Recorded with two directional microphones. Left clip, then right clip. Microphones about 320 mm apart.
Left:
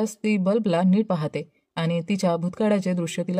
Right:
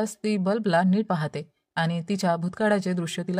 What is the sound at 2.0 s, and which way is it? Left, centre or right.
Speech, right.